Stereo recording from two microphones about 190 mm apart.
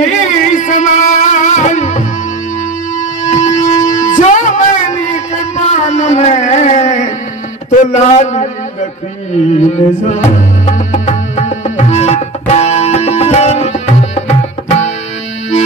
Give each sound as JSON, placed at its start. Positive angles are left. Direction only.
{"t": 0.0, "sound": "music", "side_deg": 40}
{"t": 3.3, "sound": "music", "side_deg": 35}
{"t": 7.7, "sound": "a man's voice", "side_deg": 40}
{"t": 9.3, "sound": "music", "side_deg": 40}